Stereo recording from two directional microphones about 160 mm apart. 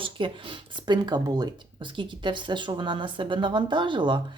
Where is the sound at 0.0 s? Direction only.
30° right (ahead or behind).